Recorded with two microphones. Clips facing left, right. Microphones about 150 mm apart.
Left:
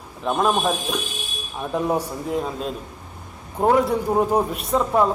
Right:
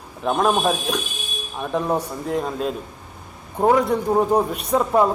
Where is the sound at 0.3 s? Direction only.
Centre (ahead or behind).